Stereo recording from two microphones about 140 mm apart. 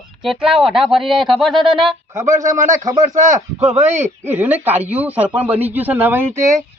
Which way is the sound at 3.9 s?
15° right (ahead or behind).